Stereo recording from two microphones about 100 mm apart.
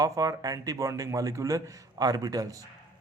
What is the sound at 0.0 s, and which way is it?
Speech, 35° right (ahead or behind).